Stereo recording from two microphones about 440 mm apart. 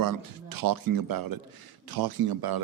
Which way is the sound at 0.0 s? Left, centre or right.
Right.